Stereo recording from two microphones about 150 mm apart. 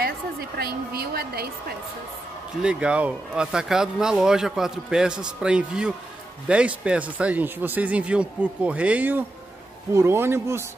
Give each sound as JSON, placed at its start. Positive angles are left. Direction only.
{"t": 0.0, "sound": "a woman's voice", "side_deg": -90}
{"t": 2.6, "sound": "speech", "side_deg": -5}